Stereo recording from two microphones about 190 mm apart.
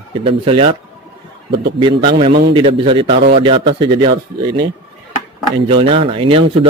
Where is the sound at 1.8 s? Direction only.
25° right (ahead or behind).